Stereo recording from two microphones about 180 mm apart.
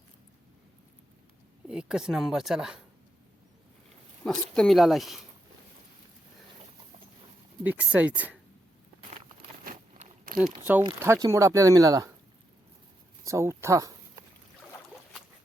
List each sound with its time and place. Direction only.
1.6 s speech: 5° right (ahead or behind)
4.2 s speech: 5° left (ahead or behind)
7.6 s speech: 10° right (ahead or behind)
9.6 s a sound: 50° right (ahead or behind)
10.6 s speech: 10° right (ahead or behind)
13.2 s speech: 15° right (ahead or behind)